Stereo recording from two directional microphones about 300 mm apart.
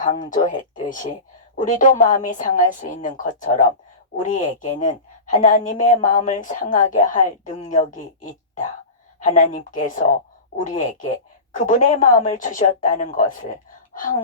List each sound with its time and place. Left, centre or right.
0.0 s a woman's voice: left